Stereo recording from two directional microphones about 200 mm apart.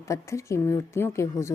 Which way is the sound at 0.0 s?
15° left (ahead or behind).